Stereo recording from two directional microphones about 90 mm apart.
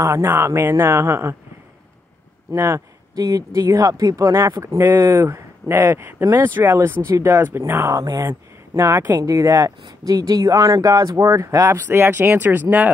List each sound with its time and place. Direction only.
0.0 s speech: 30° right (ahead or behind)
2.5 s speech: 30° right (ahead or behind)
3.2 s speech: 40° right (ahead or behind)
8.3 s speech: 30° right (ahead or behind)
9.1 s speech: 40° right (ahead or behind)
11.9 s speech: 25° right (ahead or behind)